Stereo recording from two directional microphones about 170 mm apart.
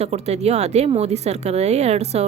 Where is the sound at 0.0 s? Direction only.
40° right (ahead or behind).